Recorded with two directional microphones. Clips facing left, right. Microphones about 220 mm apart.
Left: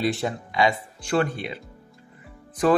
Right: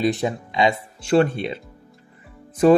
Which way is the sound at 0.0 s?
20° right (ahead or behind).